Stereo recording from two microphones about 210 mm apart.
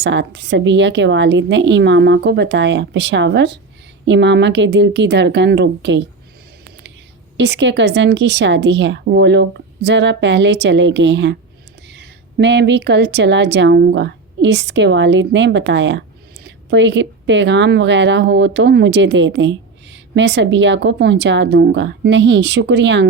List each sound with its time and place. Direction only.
0.0 s speech: 55° right (ahead or behind)
7.3 s speech: 55° right (ahead or behind)